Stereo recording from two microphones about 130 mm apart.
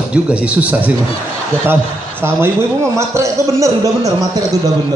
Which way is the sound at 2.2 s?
20° right (ahead or behind).